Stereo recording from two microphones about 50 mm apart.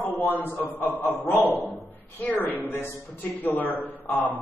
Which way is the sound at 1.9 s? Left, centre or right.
Left.